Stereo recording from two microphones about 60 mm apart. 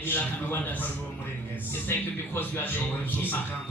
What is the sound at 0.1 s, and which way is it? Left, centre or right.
Speech, left.